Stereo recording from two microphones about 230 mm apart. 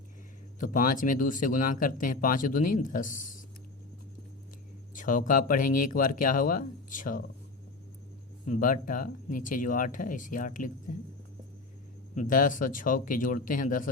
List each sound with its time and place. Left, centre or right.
0.6 s speech: left
4.9 s speech: left
8.4 s speech: left
12.1 s speech: left